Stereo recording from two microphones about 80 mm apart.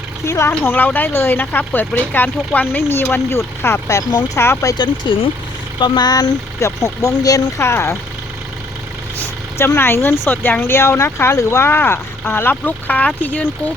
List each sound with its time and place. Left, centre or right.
0.3 s speech: left
4.7 s speech: left
6.6 s speech: left
7.6 s speech: left
9.6 s speech: left